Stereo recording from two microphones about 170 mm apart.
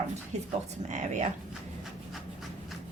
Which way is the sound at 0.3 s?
40° right (ahead or behind).